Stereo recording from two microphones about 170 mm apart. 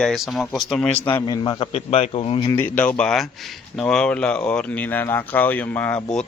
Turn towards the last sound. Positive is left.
turn(degrees=10)  # may be behind; listen again after turning